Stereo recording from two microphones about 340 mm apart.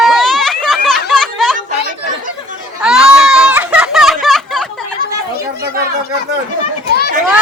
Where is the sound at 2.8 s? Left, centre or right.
Centre.